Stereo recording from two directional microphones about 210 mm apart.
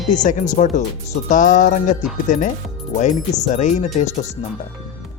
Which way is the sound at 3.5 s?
35° left (ahead or behind).